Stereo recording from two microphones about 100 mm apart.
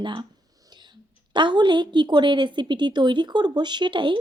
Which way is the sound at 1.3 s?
50° right (ahead or behind).